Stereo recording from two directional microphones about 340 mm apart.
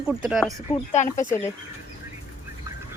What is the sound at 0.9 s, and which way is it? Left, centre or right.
Speech, left.